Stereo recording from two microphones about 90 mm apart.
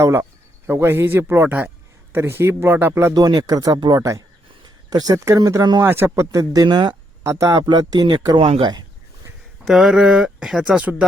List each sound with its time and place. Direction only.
0.0 s a man's voice: 25° right (ahead or behind)
3.2 s speech: 45° right (ahead or behind)
5.8 s a man's voice: 25° right (ahead or behind)
6.1 s speech: 40° right (ahead or behind)
6.7 s speech: 55° right (ahead or behind)
7.3 s speech: 35° right (ahead or behind)
7.7 s speech: 55° right (ahead or behind)
8.4 s speech: 65° right (ahead or behind)
9.6 s speech: centre (ahead or behind)